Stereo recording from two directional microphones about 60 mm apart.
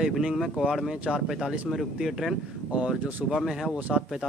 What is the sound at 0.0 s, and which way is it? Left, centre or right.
Speech, centre.